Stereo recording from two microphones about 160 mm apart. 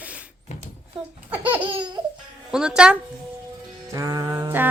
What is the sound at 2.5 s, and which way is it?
Speech, 5° right (ahead or behind).